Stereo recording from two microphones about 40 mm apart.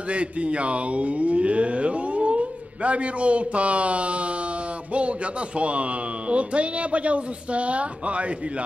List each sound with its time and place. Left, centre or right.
0.1 s speech: right
5.6 s speech: right